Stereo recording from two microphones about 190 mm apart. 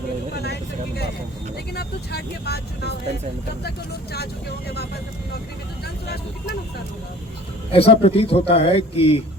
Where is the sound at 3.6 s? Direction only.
60° left (ahead or behind).